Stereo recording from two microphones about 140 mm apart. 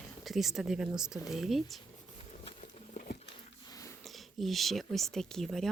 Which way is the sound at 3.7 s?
25° left (ahead or behind).